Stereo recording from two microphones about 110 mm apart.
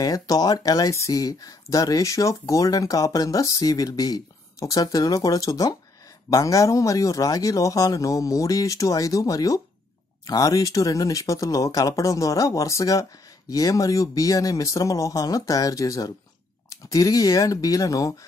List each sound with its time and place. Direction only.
0.0 s speech: 35° left (ahead or behind)